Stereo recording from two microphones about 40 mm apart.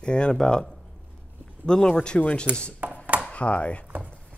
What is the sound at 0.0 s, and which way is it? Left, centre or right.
Speech, left.